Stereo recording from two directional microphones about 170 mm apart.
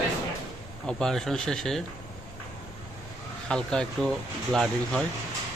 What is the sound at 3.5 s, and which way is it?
Speech, 5° left (ahead or behind).